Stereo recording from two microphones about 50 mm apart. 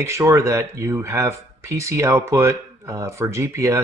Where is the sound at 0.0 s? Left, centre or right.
Right.